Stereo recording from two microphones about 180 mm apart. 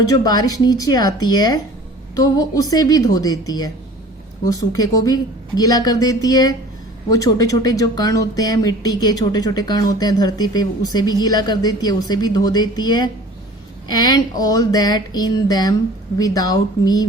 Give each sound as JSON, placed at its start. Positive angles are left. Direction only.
{"t": 0.0, "sound": "speech", "side_deg": 20}